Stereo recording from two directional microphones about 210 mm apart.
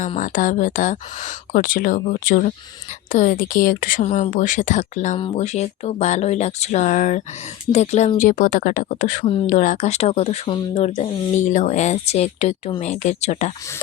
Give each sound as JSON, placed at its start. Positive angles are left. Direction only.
{"t": 0.0, "sound": "speech", "side_deg": 35}